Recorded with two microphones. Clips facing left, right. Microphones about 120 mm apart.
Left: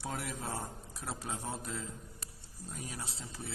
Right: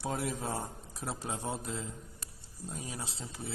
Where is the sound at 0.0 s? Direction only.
20° right (ahead or behind).